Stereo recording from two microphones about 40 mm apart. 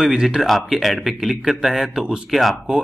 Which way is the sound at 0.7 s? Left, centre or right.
Centre.